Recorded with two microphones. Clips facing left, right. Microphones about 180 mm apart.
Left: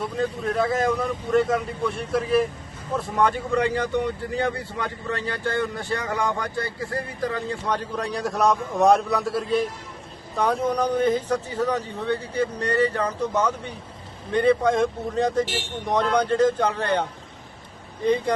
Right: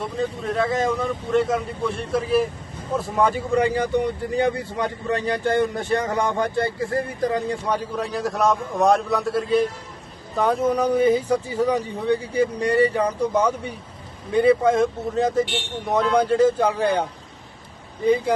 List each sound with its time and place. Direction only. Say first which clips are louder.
0.0 s speech: even; centre (ahead or behind); by 7.8 s 20° right (ahead or behind)
7.9 s speech: right 1 dB; centre (ahead or behind)